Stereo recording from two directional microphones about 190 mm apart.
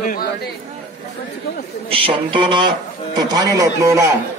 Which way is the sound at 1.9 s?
25° right (ahead or behind).